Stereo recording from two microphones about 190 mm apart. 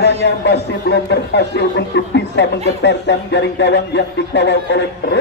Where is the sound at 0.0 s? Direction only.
60° left (ahead or behind).